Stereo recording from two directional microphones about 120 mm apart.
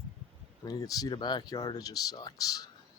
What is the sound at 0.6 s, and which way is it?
Speech, 30° left (ahead or behind).